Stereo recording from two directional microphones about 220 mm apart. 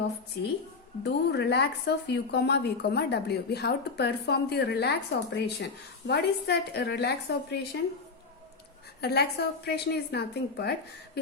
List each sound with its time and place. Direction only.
1.0 s a woman's voice: 50° left (ahead or behind)
9.0 s a woman's voice: 45° left (ahead or behind)